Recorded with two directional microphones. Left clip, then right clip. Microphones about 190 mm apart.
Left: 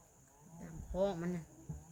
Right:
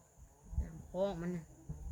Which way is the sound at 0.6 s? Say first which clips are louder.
Left 1 dB; centre (ahead or behind).